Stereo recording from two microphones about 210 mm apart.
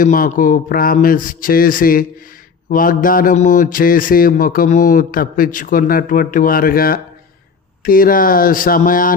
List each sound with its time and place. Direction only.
0.0 s speech: 40° left (ahead or behind)